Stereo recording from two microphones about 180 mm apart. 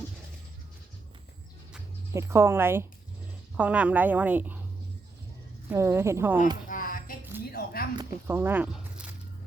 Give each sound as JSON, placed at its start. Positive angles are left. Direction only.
{"t": 2.1, "sound": "a woman's voice", "side_deg": -15}
{"t": 5.6, "sound": "a woman's voice", "side_deg": -15}
{"t": 6.7, "sound": "a sound", "side_deg": 50}
{"t": 8.3, "sound": "speech", "side_deg": -10}